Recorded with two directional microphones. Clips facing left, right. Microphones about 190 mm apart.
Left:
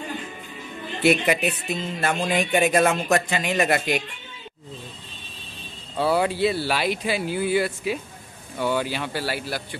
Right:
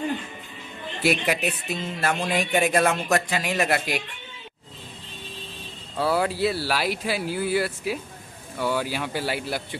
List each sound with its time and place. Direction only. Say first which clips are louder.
1.2 s speech: left 3 dB; centre (ahead or behind)
5.9 s speech: left 2 dB; centre (ahead or behind)
9.2 s speech: even; 20° right (ahead or behind)